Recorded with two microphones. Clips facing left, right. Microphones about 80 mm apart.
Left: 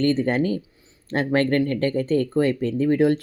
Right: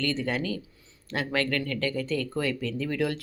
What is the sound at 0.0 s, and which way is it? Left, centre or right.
Speech, left.